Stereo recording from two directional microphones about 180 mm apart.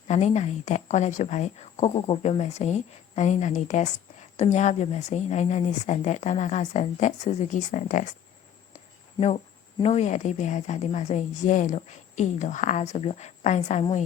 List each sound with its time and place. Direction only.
0.1 s a woman's voice: 40° left (ahead or behind)
9.8 s a woman's voice: 40° left (ahead or behind)